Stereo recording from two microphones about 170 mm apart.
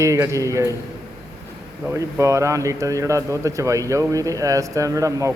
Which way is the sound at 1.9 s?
15° right (ahead or behind).